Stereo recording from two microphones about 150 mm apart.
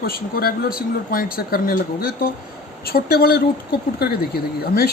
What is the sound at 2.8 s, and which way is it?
Speech, 90° left.